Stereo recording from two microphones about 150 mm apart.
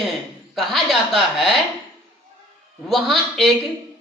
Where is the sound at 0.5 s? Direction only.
Centre (ahead or behind).